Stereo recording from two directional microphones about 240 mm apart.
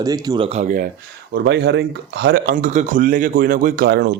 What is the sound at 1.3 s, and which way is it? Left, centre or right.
Speech, right.